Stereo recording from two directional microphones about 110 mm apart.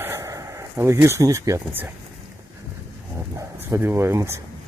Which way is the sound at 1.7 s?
20° right (ahead or behind).